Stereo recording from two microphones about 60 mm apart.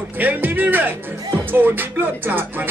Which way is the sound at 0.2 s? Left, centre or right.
Right.